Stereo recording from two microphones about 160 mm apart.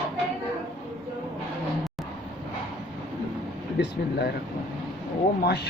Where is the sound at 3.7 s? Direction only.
90° left.